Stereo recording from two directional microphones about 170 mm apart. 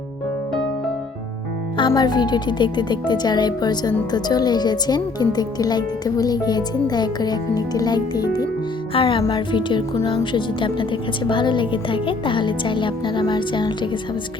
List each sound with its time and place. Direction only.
1.8 s speech: 25° left (ahead or behind)
8.9 s music: 30° left (ahead or behind)
9.2 s speech: 25° left (ahead or behind)